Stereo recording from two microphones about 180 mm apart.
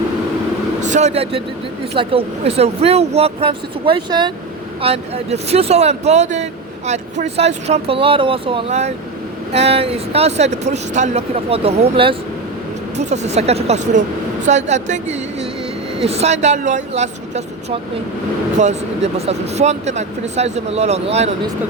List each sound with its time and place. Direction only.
0.8 s speech: 40° right (ahead or behind)